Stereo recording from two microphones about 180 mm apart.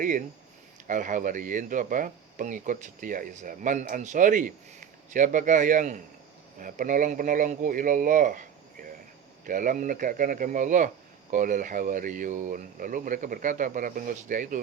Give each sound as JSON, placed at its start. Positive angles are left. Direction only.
{"t": 0.0, "sound": "speech", "side_deg": -45}